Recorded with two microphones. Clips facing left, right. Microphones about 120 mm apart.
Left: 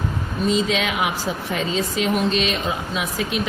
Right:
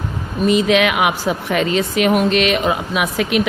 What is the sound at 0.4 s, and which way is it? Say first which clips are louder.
A woman's voice: right 7 dB; 65° right (ahead or behind).